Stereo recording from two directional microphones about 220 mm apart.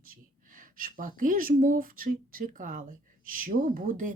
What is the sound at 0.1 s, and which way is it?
Speech, 40° right (ahead or behind).